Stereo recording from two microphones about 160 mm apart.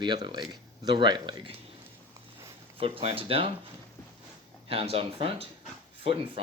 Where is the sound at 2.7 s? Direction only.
35° right (ahead or behind).